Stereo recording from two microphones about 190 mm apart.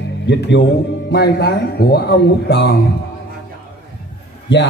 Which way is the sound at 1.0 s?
60° left (ahead or behind).